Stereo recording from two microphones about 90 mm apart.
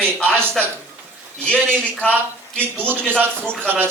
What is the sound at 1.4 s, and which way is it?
Speech, 15° left (ahead or behind).